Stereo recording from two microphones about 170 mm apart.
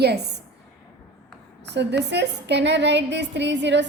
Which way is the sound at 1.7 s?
90° right.